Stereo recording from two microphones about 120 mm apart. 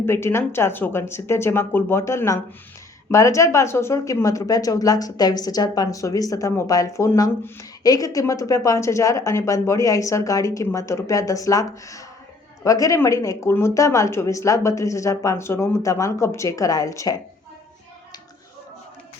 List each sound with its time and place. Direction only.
0.0 s speech: 20° left (ahead or behind)